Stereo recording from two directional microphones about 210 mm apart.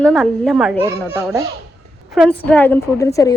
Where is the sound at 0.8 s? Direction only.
10° right (ahead or behind).